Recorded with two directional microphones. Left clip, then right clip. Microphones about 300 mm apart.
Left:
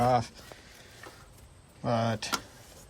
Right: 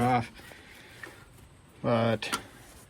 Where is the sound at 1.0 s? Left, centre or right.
Centre.